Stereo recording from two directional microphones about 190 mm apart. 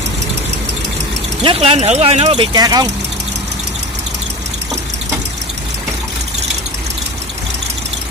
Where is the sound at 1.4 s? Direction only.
30° right (ahead or behind).